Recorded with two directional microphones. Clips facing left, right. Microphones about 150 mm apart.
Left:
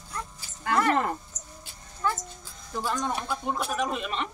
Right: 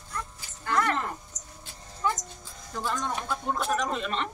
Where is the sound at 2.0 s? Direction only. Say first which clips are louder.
Even; 15° right (ahead or behind).